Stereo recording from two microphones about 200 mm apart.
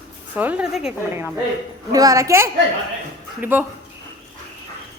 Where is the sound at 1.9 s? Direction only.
15° right (ahead or behind).